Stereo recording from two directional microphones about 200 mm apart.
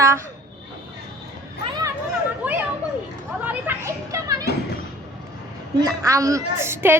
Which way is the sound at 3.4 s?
10° right (ahead or behind).